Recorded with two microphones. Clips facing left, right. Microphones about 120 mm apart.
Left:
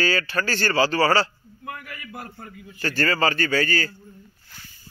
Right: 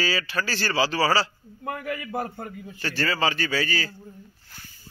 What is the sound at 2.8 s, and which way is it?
A man's voice, centre (ahead or behind).